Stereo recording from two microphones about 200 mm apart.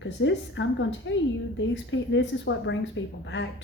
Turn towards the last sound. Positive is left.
turn(degrees=65)  # may be behind; listen again after turning